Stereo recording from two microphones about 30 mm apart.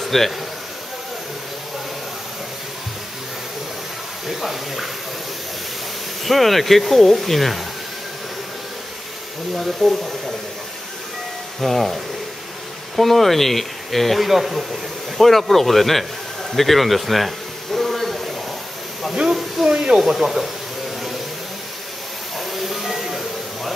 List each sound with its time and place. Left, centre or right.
0.0 s a sound: centre
4.3 s speech: centre
6.2 s speech: centre
9.6 s speech: centre
11.6 s speech: centre
14.2 s speech: centre
15.1 s speech: centre
17.7 s a sound: centre
19.6 s speech: right
20.2 s speech: centre
22.5 s music: centre